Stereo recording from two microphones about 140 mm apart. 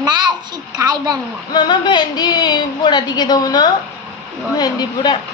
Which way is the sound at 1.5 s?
30° left (ahead or behind).